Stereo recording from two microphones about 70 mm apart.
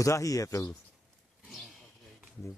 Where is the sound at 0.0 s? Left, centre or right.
Left.